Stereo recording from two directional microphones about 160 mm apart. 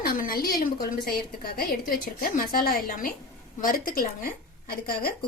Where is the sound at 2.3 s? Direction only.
65° left (ahead or behind).